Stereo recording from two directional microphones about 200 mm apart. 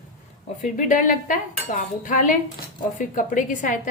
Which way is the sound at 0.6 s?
40° left (ahead or behind).